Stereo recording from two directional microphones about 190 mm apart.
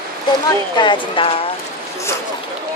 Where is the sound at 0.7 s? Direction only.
25° left (ahead or behind).